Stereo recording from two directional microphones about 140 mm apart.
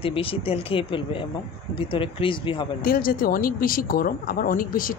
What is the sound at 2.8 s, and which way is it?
Speech, 90° left.